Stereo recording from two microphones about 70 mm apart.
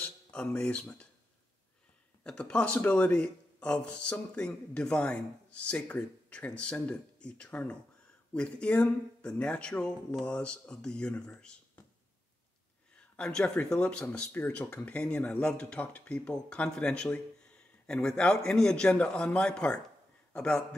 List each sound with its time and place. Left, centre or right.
0.0 s speech: centre
2.2 s speech: centre
12.9 s speech: centre